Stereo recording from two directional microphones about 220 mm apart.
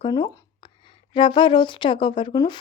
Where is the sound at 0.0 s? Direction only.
20° left (ahead or behind).